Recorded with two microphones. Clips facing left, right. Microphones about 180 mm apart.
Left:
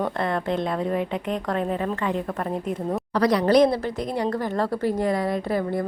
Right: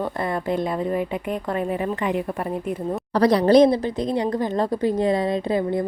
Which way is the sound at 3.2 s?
30° right (ahead or behind).